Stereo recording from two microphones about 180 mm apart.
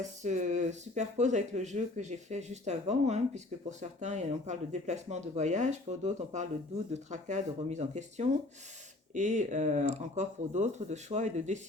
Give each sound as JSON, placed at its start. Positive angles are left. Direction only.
{"t": 0.2, "sound": "speech", "side_deg": -40}